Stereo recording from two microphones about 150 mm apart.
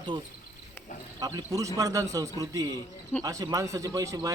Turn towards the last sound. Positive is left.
turn(degrees=-25)  # may be behind; listen again after turning